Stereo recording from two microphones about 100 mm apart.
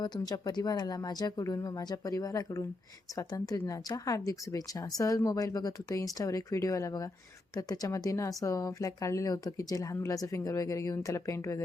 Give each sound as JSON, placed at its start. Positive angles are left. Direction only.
{"t": 0.0, "sound": "speech", "side_deg": 45}